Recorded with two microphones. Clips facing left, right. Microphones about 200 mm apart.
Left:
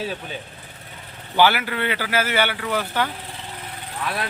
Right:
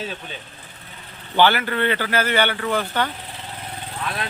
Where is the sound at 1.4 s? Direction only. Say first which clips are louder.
Right 1 dB; 10° left (ahead or behind).